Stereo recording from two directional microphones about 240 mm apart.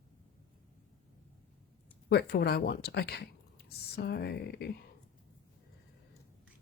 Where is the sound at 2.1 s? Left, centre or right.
Left.